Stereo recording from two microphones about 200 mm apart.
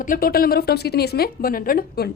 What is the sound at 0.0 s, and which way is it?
A woman's voice, 45° left (ahead or behind).